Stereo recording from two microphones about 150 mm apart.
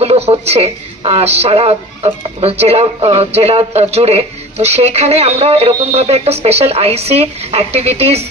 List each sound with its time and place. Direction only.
0.0 s a woman's voice: 40° right (ahead or behind)